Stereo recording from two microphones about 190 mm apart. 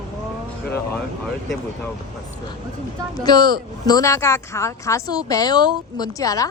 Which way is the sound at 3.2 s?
20° left (ahead or behind).